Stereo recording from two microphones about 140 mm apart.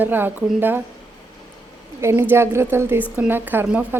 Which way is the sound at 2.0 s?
20° right (ahead or behind).